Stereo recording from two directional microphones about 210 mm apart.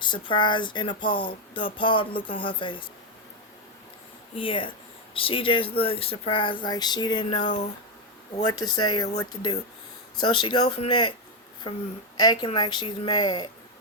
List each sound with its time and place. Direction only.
0.0 s speech: 20° left (ahead or behind)
4.4 s speech: 25° left (ahead or behind)
8.7 s speech: 20° left (ahead or behind)
12.1 s speech: 20° left (ahead or behind)